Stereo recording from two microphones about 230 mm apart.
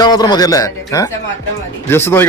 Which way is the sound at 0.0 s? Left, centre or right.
Centre.